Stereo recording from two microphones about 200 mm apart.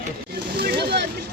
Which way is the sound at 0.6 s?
55° right (ahead or behind).